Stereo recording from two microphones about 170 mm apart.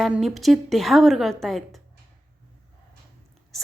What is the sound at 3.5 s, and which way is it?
Whispering, centre (ahead or behind).